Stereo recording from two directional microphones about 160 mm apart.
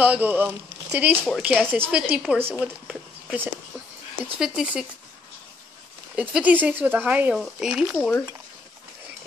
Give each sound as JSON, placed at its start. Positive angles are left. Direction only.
{"t": 0.0, "sound": "speech", "side_deg": -10}
{"t": 6.1, "sound": "speech", "side_deg": -10}